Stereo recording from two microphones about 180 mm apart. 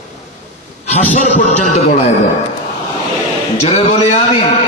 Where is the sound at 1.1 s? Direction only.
40° left (ahead or behind).